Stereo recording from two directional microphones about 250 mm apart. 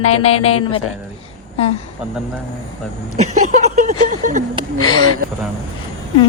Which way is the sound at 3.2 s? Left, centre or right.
Right.